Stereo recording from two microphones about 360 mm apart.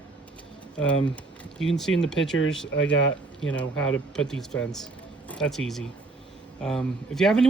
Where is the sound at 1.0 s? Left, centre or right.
Centre.